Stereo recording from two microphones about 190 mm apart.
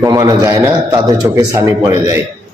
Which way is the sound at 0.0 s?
20° right (ahead or behind).